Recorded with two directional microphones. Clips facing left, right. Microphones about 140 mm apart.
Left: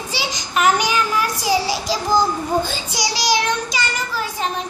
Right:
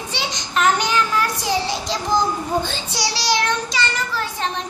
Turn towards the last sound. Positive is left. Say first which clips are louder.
# left 1 dB
turn(degrees=10)  # may be behind; listen again after turning